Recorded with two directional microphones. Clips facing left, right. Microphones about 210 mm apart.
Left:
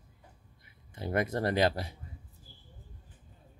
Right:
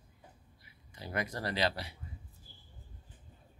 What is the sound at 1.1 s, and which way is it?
Speech, 50° left (ahead or behind).